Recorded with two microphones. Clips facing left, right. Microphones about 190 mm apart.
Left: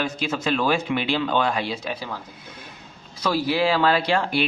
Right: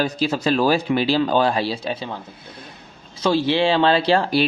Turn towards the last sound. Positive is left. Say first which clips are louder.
# right 4 dB
turn(degrees=-35)  # may be behind; listen again after turning